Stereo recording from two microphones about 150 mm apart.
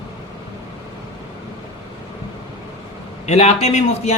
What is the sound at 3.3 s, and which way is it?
Speech, 45° left (ahead or behind).